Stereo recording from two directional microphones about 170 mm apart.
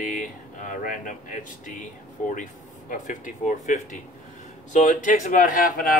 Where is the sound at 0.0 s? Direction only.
50° left (ahead or behind).